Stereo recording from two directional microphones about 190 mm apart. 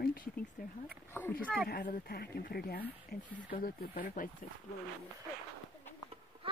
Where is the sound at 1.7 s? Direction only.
50° left (ahead or behind).